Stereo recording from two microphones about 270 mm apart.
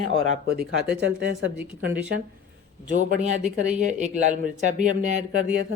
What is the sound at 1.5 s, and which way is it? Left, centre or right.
Speech, centre.